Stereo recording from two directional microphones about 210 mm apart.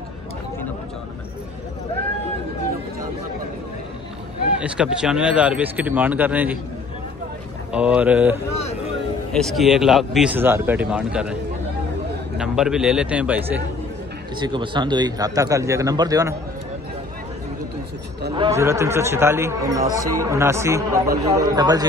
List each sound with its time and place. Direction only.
4.6 s speech: 5° right (ahead or behind)
7.7 s speech: 5° right (ahead or behind)
12.4 s speech: 5° right (ahead or behind)
14.4 s speech: 20° right (ahead or behind)
18.3 s speech: 20° right (ahead or behind)
19.8 s speech: 40° right (ahead or behind)
20.2 s speech: 15° right (ahead or behind)